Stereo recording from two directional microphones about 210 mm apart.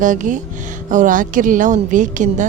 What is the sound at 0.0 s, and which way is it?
A woman's voice, 40° right (ahead or behind).